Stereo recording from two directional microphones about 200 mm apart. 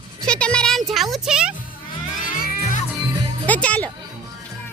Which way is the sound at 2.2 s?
40° left (ahead or behind).